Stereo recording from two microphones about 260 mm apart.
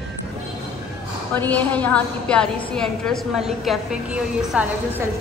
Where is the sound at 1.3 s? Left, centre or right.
Centre.